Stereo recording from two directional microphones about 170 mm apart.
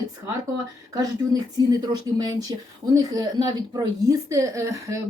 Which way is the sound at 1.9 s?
25° right (ahead or behind).